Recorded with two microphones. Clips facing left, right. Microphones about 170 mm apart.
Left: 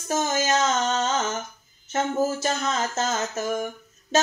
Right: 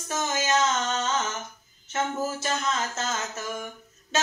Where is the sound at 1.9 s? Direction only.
35° left (ahead or behind).